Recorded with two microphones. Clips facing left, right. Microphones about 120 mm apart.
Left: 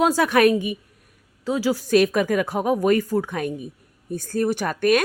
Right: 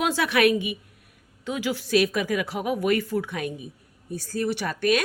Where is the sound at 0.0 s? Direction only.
40° left (ahead or behind).